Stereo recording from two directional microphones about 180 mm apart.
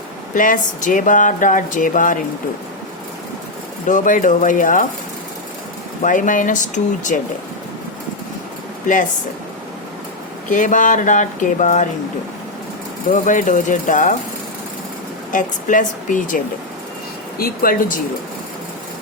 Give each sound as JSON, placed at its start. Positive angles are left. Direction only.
{"t": 0.3, "sound": "speech", "side_deg": 45}
{"t": 3.8, "sound": "speech", "side_deg": 45}
{"t": 6.0, "sound": "speech", "side_deg": 45}
{"t": 10.5, "sound": "speech", "side_deg": 45}
{"t": 13.1, "sound": "speech", "side_deg": 45}
{"t": 15.3, "sound": "speech", "side_deg": 45}
{"t": 17.4, "sound": "speech", "side_deg": 50}